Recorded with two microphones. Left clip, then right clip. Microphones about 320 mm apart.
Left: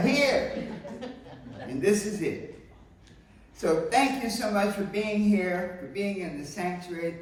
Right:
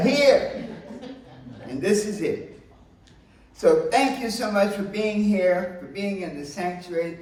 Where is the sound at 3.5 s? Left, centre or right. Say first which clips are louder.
Right 5 dB; centre.